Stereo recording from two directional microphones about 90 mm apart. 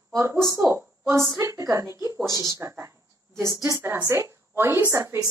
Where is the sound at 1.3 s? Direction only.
40° right (ahead or behind).